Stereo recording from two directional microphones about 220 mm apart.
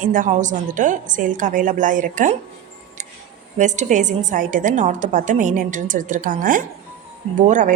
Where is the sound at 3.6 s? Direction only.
35° right (ahead or behind).